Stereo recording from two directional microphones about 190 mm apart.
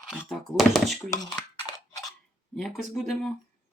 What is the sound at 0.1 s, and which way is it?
Speech, centre (ahead or behind).